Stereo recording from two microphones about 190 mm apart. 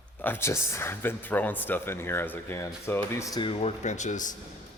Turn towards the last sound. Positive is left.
turn(degrees=40)  # may be behind; listen again after turning